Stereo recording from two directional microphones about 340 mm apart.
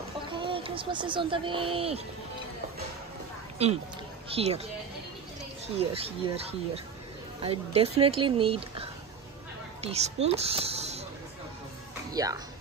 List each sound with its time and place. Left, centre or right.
0.4 s speech: centre
3.6 s speech: centre
5.8 s speech: centre
12.1 s speech: centre